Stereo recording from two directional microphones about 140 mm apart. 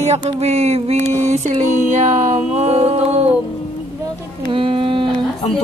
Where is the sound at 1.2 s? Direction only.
55° right (ahead or behind).